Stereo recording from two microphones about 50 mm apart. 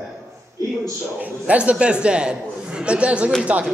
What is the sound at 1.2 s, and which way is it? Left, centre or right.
A man's voice, right.